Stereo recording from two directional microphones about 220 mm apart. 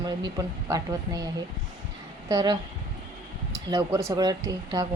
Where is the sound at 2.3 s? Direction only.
20° right (ahead or behind).